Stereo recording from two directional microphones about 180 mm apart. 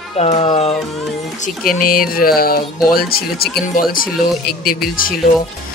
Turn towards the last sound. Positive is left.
turn(degrees=55)  # may be behind; listen again after turning